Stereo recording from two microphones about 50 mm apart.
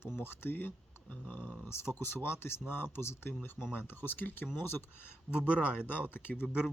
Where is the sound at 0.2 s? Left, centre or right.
Left.